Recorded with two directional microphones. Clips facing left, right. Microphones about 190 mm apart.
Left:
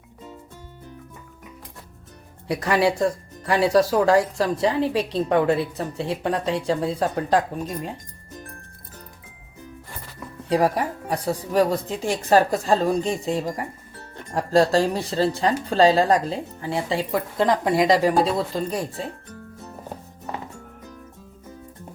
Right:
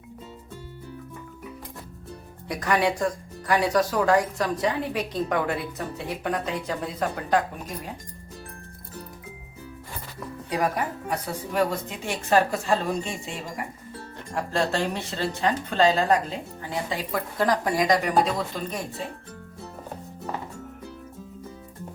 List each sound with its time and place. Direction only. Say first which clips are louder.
2.5 s speech: left 3 dB; 30° left (ahead or behind)
10.5 s speech: left 6 dB; 30° left (ahead or behind)